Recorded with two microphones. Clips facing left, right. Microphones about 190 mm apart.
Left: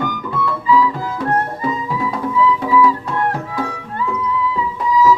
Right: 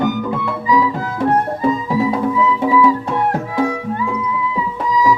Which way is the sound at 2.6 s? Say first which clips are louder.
Right 1 dB; 15° right (ahead or behind).